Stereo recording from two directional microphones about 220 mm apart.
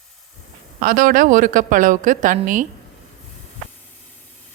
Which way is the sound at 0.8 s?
40° right (ahead or behind).